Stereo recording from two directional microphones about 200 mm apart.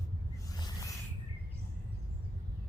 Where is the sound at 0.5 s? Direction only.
20° left (ahead or behind).